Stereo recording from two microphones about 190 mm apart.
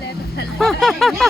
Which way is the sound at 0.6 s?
Centre (ahead or behind).